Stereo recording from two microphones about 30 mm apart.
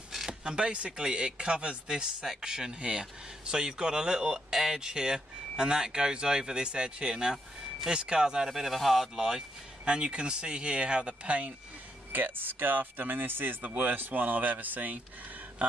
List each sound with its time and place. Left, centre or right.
0.3 s speech: right
8.5 s speech: centre
9.8 s speech: right
12.1 s speech: right
13.7 s speech: right